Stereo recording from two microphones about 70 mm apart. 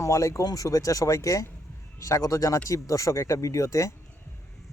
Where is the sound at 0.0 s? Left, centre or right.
Left.